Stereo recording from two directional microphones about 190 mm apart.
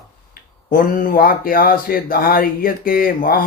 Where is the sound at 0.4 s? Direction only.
50° left (ahead or behind).